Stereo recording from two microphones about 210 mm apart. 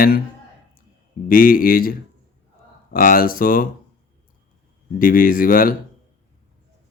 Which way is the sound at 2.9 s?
45° left (ahead or behind).